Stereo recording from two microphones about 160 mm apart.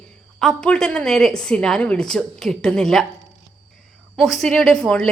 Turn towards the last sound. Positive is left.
turn(degrees=5)  # may be behind; listen again after turning